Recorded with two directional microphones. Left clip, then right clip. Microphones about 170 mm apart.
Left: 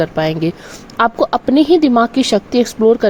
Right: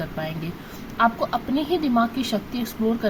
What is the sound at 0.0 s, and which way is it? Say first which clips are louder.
Speech: left 15 dB; 55° left (ahead or behind).